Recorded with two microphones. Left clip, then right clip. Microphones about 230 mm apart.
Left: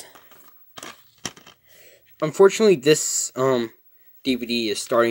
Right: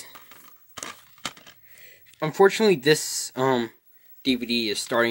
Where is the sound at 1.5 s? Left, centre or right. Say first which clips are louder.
Even; centre.